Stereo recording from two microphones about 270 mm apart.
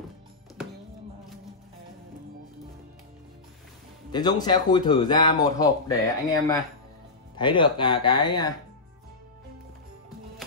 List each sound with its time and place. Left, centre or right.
4.1 s speech: centre